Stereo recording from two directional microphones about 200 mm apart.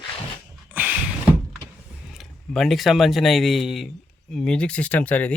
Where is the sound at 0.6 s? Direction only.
10° right (ahead or behind).